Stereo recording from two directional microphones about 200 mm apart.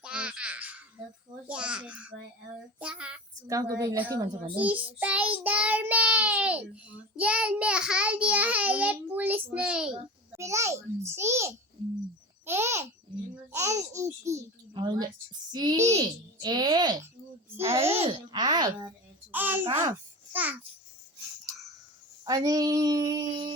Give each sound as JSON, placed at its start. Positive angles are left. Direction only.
{"t": 0.0, "sound": "babbling", "side_deg": -5}
{"t": 2.7, "sound": "child singing", "side_deg": -5}
{"t": 3.4, "sound": "a child's voice", "side_deg": -15}
{"t": 4.5, "sound": "child singing", "side_deg": -5}
{"t": 10.3, "sound": "a child's voice", "side_deg": -15}
{"t": 18.0, "sound": "speech", "side_deg": -20}
{"t": 19.3, "sound": "a child's voice", "side_deg": -10}
{"t": 19.6, "sound": "a child's voice", "side_deg": -20}
{"t": 22.2, "sound": "speech", "side_deg": -20}